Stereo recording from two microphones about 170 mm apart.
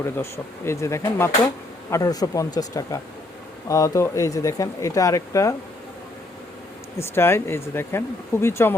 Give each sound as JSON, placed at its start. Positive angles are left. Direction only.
{"t": 0.0, "sound": "speech", "side_deg": 15}
{"t": 7.0, "sound": "speech", "side_deg": 15}